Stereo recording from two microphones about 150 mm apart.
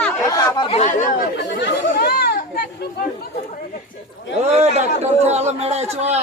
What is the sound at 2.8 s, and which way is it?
Speech, 90° left.